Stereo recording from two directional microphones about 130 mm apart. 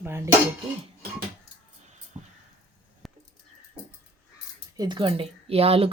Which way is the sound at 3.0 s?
Centre (ahead or behind).